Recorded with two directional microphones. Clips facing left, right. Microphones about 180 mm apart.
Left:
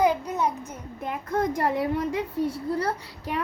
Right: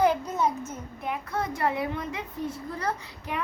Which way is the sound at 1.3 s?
40° left (ahead or behind).